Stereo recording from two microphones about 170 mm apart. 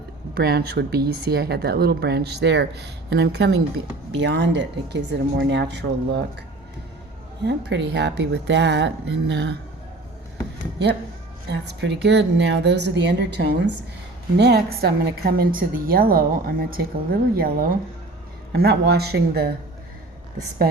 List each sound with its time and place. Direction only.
0.3 s speech: 65° right (ahead or behind)
4.1 s a woman's voice: 90° right
7.4 s a woman's voice: 85° right
11.4 s a woman's voice: 85° right
14.3 s a woman's voice: 80° right